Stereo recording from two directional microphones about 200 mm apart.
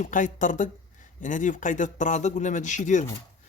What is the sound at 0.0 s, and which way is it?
Speech, 40° left (ahead or behind).